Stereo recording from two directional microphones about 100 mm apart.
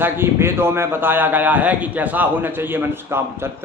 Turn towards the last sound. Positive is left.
turn(degrees=-20)  # may be behind; listen again after turning